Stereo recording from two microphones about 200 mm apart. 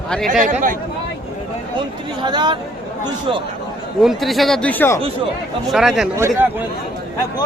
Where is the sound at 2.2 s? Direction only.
20° right (ahead or behind).